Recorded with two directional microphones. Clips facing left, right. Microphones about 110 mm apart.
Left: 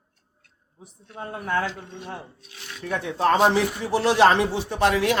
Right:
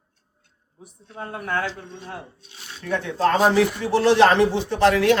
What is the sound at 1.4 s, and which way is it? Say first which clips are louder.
Speech: left 1 dB; 30° left (ahead or behind).